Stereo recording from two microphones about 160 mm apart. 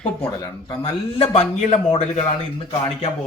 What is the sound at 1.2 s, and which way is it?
A man's voice, 40° left (ahead or behind).